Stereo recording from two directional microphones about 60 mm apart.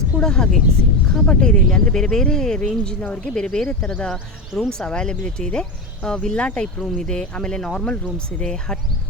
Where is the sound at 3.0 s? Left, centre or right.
Left.